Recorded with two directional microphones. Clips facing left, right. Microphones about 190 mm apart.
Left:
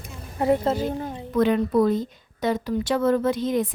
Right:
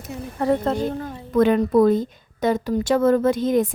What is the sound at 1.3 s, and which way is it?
A woman's voice, 50° right (ahead or behind).